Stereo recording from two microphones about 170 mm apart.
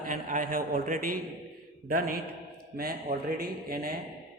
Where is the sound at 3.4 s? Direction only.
60° right (ahead or behind).